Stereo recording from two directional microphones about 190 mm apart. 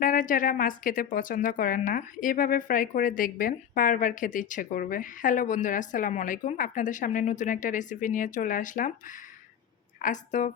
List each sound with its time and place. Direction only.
0.0 s a woman's voice: 45° left (ahead or behind)